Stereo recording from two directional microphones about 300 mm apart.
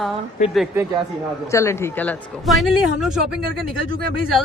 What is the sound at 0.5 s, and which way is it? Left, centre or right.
Speech, centre.